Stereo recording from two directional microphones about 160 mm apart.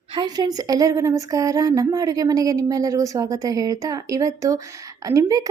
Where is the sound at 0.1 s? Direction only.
25° right (ahead or behind).